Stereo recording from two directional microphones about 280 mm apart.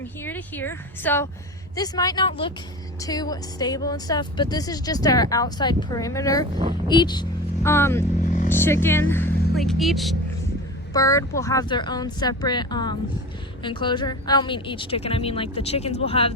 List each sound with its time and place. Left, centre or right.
0.0 s speech: centre
6.5 s speech: centre
6.8 s speech: centre
10.9 s a woman's voice: centre